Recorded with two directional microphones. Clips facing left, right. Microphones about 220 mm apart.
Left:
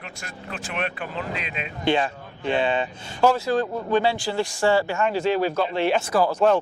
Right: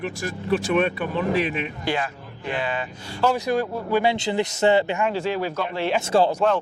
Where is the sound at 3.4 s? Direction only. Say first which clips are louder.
Even; 15° right (ahead or behind).